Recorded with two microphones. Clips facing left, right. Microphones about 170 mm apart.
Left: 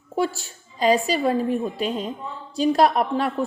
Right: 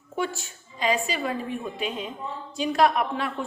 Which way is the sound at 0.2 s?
35° left (ahead or behind).